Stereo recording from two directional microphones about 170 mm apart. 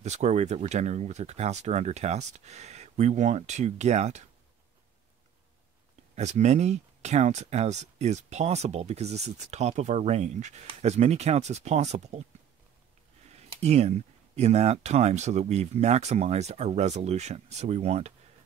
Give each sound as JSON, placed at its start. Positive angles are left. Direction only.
{"t": 0.0, "sound": "speech", "side_deg": -40}
{"t": 6.1, "sound": "speech", "side_deg": -40}
{"t": 13.3, "sound": "speech", "side_deg": -40}